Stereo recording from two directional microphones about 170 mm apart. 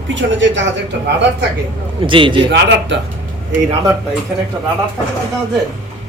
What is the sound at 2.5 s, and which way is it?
Speech, 90° right.